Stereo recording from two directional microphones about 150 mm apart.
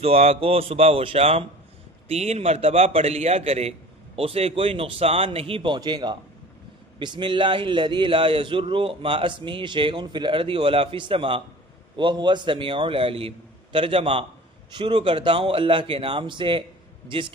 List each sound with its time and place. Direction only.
0.0 s a man's voice: 40° right (ahead or behind)